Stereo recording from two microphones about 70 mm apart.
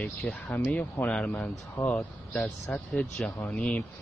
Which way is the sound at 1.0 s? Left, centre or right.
Centre.